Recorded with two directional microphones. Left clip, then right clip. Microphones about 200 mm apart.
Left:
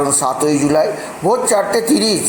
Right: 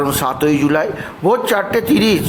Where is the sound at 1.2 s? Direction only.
40° right (ahead or behind).